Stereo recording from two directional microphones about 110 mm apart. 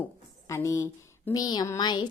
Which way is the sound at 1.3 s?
35° left (ahead or behind).